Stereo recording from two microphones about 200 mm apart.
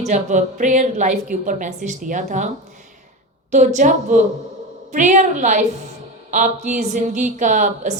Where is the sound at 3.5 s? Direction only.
35° right (ahead or behind).